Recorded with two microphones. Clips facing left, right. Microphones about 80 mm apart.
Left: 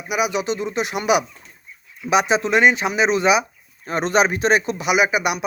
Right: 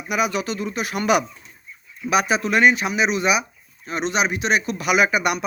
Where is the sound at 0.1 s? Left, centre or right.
Centre.